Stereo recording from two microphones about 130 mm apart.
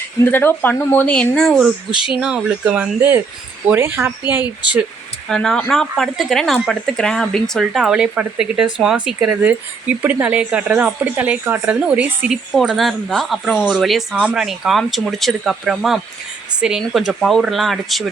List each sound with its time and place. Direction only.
0.3 s speech: 15° left (ahead or behind)
2.0 s a woman's voice: 5° right (ahead or behind)
5.3 s a woman's voice: 5° left (ahead or behind); by 12.4 s 10° right (ahead or behind)
12.5 s speech: centre (ahead or behind)